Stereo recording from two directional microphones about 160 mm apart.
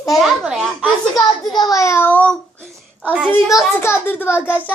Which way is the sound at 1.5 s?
20° left (ahead or behind).